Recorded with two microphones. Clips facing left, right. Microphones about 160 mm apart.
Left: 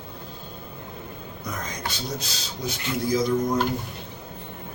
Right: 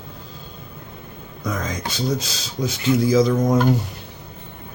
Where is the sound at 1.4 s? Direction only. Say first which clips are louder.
Right 7 dB; 90° right.